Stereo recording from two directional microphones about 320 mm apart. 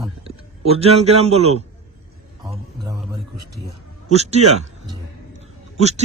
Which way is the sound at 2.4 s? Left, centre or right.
Centre.